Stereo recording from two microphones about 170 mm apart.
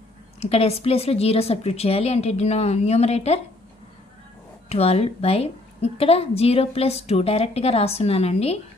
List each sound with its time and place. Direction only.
0.4 s a woman's voice: 35° left (ahead or behind)
4.6 s a woman's voice: 35° left (ahead or behind)